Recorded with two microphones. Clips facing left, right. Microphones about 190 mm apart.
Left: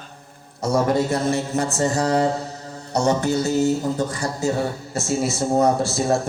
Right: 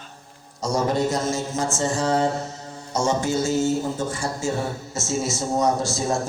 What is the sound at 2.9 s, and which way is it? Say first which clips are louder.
Speech: left 3 dB; 65° left (ahead or behind).